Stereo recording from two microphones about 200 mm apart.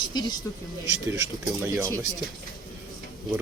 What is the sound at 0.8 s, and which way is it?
Speech, 15° right (ahead or behind).